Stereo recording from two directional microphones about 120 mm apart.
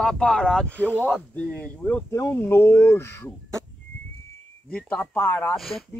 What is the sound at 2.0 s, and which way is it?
Speech, 25° left (ahead or behind).